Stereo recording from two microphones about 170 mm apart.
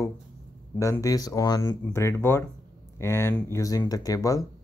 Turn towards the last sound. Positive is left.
turn(degrees=20)  # may be behind; listen again after turning